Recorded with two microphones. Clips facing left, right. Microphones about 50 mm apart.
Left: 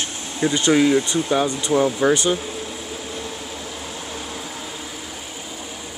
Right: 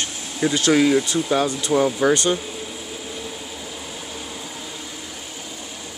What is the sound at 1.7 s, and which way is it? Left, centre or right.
Speech, centre.